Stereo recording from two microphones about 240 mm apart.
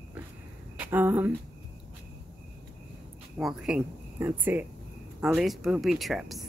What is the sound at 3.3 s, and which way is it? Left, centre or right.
Speech, centre.